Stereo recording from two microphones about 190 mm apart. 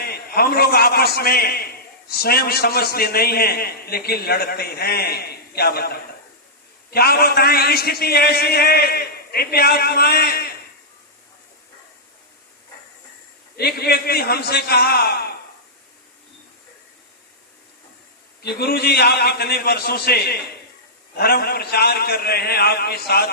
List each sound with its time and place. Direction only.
0.0 s a man's voice: 55° left (ahead or behind)
13.6 s a man's voice: 55° left (ahead or behind)
18.4 s a man's voice: 55° left (ahead or behind)